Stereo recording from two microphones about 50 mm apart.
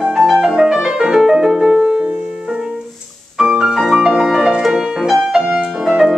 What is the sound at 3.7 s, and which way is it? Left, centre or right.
Music, centre.